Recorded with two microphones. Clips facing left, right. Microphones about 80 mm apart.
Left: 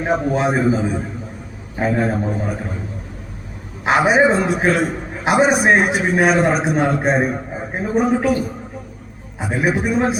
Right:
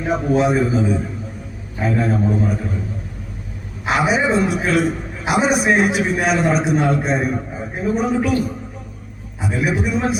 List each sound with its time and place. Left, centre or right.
0.0 s a man's voice: left
3.8 s a man's voice: left
9.5 s a man's voice: left